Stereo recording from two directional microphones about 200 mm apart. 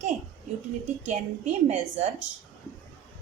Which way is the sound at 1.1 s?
35° right (ahead or behind).